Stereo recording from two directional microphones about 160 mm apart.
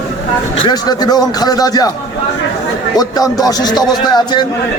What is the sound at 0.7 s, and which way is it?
Speech, 25° left (ahead or behind).